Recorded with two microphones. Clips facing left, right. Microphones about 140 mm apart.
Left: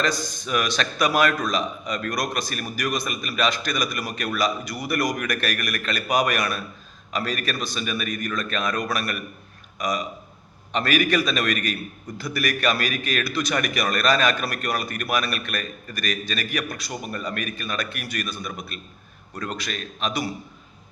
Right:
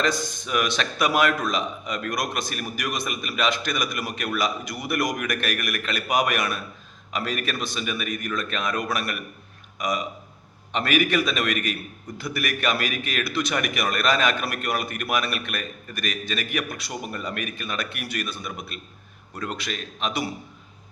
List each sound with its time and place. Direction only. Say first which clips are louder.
0.2 s a man's voice: even; 20° right (ahead or behind)